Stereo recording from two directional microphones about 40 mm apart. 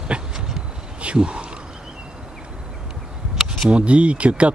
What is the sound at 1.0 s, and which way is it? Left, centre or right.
Speech, right.